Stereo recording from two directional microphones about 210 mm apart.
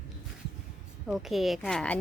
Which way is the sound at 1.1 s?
Centre (ahead or behind).